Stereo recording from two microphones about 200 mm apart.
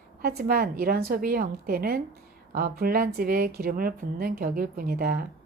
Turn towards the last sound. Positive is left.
turn(degrees=-50)  # may be behind; listen again after turning